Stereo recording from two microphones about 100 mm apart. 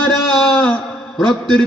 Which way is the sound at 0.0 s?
10° left (ahead or behind).